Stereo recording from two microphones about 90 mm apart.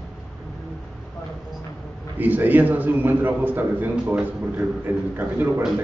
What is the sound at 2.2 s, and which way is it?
A man's voice, 20° right (ahead or behind).